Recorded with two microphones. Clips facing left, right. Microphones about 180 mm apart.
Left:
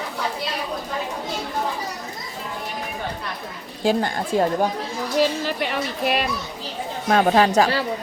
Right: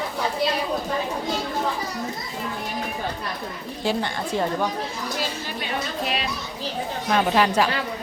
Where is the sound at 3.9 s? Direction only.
45° left (ahead or behind).